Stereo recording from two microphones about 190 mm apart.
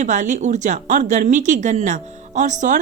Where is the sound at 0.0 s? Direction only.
40° right (ahead or behind).